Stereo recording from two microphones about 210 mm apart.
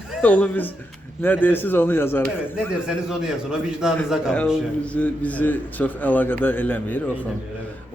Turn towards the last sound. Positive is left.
turn(degrees=10)  # may be behind; listen again after turning